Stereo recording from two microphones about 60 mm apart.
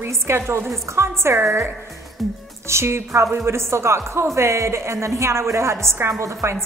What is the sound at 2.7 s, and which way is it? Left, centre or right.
Speech, right.